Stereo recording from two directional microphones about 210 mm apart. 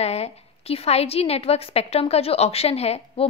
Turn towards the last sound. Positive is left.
turn(degrees=30)  # may be behind; listen again after turning